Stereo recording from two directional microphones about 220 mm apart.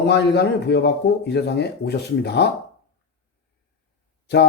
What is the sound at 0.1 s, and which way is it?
Speech, 50° left (ahead or behind).